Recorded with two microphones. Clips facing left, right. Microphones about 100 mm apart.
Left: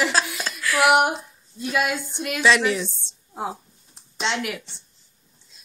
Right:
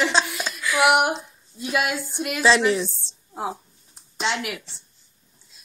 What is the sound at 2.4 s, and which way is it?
Speech, 30° right (ahead or behind).